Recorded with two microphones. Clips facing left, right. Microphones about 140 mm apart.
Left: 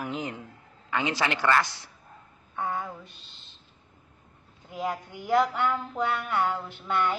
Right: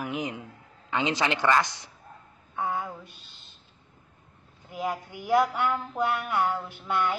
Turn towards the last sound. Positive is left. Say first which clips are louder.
# even
turn(degrees=-10)  # may be behind; listen again after turning